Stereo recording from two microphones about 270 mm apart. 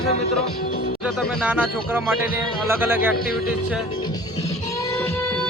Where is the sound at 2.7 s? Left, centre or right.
Centre.